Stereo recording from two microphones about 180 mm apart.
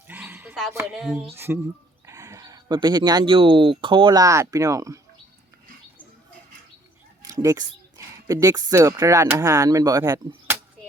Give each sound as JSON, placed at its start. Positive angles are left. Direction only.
{"t": 0.1, "sound": "a sound", "side_deg": -10}
{"t": 0.9, "sound": "speech", "side_deg": 0}
{"t": 7.2, "sound": "speech", "side_deg": -20}